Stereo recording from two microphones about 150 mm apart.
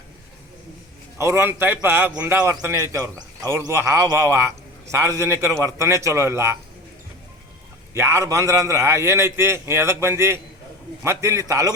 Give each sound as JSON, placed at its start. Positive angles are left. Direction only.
{"t": 1.2, "sound": "a man's voice", "side_deg": -15}
{"t": 7.9, "sound": "a man's voice", "side_deg": -15}